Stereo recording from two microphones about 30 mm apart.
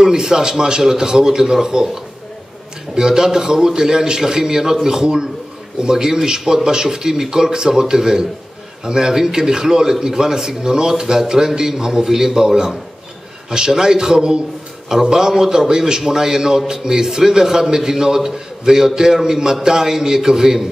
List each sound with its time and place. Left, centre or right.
0.0 s a man's voice: right
2.9 s a man's voice: centre